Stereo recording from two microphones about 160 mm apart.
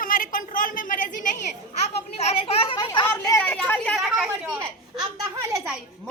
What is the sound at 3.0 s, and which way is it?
A woman's voice, 20° left (ahead or behind).